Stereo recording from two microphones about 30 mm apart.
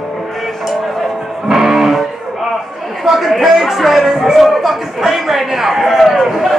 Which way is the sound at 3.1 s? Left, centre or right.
Centre.